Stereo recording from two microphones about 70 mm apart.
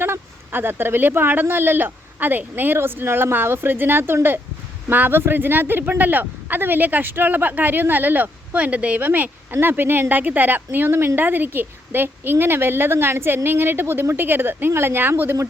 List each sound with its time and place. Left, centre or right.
0.0 s speech: right